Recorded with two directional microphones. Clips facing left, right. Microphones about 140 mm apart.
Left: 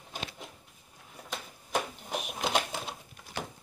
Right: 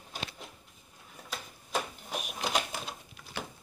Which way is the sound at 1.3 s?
20° left (ahead or behind).